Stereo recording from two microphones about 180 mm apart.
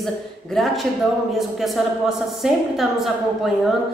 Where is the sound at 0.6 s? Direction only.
Centre (ahead or behind).